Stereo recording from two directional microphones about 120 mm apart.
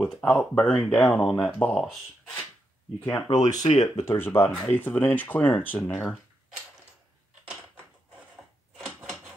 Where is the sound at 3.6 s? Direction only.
65° left (ahead or behind).